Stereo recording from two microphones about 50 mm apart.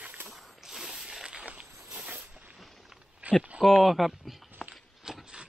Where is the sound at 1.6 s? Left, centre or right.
Right.